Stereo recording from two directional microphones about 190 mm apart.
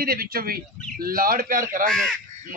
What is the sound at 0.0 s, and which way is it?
A man's voice, 50° right (ahead or behind).